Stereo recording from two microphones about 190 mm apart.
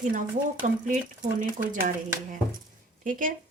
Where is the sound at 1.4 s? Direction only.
45° right (ahead or behind).